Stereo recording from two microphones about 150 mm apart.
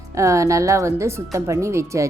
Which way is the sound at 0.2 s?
20° right (ahead or behind).